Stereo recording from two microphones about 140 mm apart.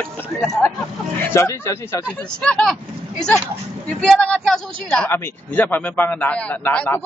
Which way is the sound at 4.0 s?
5° left (ahead or behind).